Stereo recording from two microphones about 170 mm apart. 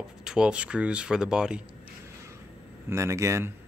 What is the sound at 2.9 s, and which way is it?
Speech, 15° right (ahead or behind).